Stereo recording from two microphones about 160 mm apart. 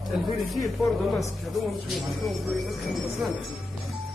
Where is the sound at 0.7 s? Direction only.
Centre (ahead or behind).